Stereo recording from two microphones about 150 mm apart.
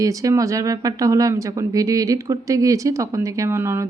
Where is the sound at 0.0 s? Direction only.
20° right (ahead or behind).